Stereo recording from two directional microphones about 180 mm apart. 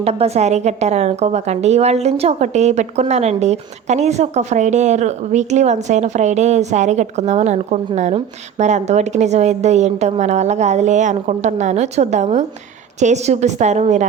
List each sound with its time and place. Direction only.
0.0 s a woman's voice: 35° right (ahead or behind)